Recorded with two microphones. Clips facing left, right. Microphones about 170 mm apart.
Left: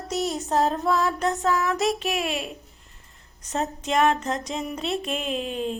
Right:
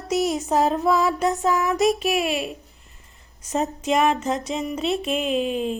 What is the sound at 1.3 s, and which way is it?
Mantra, 15° right (ahead or behind).